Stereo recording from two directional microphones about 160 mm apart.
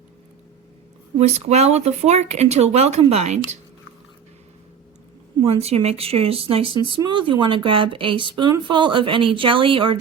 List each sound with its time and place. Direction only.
1.2 s speech: 45° right (ahead or behind)
5.5 s speech: 40° right (ahead or behind)